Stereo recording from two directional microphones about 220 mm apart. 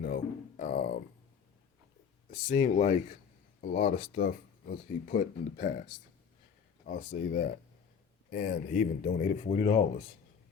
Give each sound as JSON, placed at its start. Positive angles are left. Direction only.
{"t": 0.0, "sound": "speech", "side_deg": 40}
{"t": 2.3, "sound": "speech", "side_deg": 40}
{"t": 6.8, "sound": "speech", "side_deg": 40}